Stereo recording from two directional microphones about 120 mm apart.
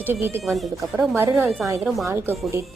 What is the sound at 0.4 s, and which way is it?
Speech, centre (ahead or behind).